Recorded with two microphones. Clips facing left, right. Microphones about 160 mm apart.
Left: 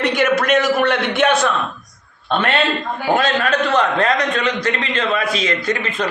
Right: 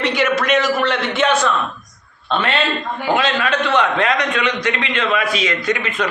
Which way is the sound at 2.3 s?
50° left (ahead or behind).